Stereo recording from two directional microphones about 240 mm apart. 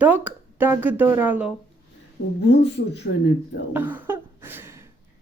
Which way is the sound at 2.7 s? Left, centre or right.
Left.